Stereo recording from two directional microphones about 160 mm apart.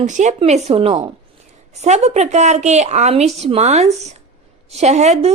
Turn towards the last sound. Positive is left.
turn(degrees=-45)  # may be behind; listen again after turning